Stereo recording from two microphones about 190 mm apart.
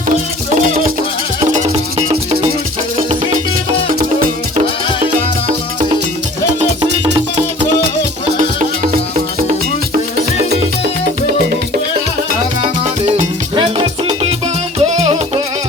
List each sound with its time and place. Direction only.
0.5 s music: 45° right (ahead or behind)
1.5 s music: 30° right (ahead or behind)
8.4 s music: 40° right (ahead or behind)
12.6 s music: 40° right (ahead or behind)
13.6 s music: 30° right (ahead or behind)